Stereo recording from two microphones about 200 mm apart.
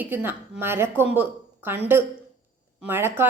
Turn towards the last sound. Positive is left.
turn(degrees=-10)  # may be behind; listen again after turning